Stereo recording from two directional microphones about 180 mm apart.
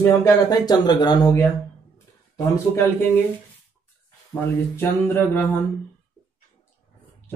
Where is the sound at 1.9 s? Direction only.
15° left (ahead or behind).